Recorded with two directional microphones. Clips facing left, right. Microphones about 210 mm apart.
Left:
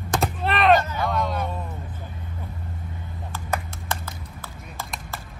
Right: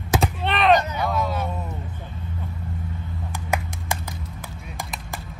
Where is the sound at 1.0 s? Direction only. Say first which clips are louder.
Right 1 dB; 5° right (ahead or behind).